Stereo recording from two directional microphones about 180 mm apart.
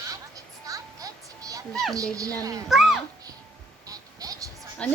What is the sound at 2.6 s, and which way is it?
Speech, centre (ahead or behind).